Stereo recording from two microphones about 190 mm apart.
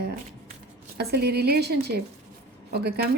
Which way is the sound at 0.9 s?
60° right (ahead or behind).